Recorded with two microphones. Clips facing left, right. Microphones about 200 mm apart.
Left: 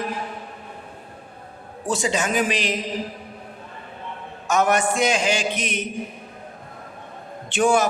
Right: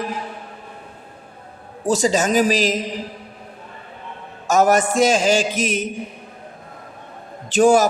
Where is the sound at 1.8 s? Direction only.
40° right (ahead or behind).